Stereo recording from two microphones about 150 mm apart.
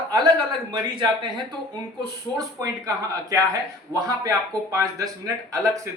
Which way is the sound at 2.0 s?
25° right (ahead or behind).